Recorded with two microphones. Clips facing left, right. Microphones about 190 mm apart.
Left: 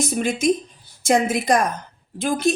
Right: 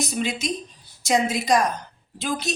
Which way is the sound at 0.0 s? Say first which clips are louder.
Left 6 dB; 50° left (ahead or behind).